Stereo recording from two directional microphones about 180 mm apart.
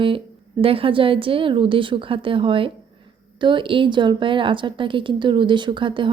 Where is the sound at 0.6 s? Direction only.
30° right (ahead or behind).